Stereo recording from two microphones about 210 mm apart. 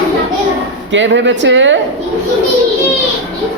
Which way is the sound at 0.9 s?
60° right (ahead or behind).